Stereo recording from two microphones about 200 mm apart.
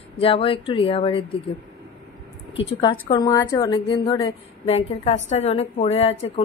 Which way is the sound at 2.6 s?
25° left (ahead or behind).